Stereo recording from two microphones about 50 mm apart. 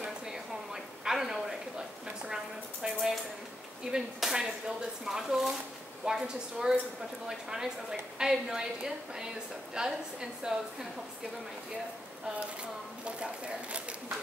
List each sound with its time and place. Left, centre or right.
1.0 s a sound: centre
3.9 s a woman's voice: centre
13.0 s speech: right